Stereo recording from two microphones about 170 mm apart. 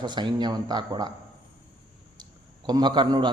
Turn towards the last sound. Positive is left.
turn(degrees=-25)  # may be behind; listen again after turning